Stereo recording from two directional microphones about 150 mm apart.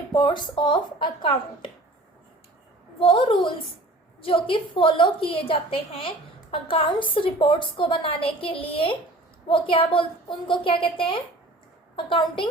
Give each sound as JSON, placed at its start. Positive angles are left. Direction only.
{"t": 0.1, "sound": "a woman's voice", "side_deg": 30}
{"t": 3.0, "sound": "a woman's voice", "side_deg": 35}